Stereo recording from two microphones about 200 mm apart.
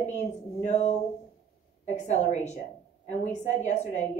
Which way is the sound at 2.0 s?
35° left (ahead or behind).